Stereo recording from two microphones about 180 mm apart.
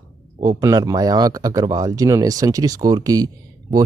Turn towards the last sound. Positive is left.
turn(degrees=-20)  # may be behind; listen again after turning